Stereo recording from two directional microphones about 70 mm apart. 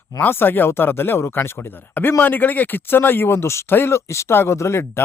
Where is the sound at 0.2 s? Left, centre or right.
Left.